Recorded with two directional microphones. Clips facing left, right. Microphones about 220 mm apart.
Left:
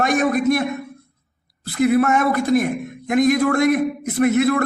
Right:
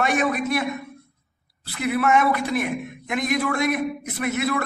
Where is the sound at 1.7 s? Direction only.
45° left (ahead or behind).